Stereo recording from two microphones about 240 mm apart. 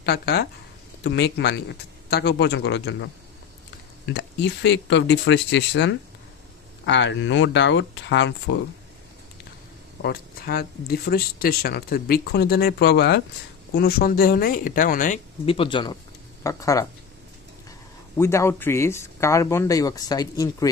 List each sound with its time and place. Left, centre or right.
0.0 s speech: left
10.0 s speech: left
15.4 s speech: left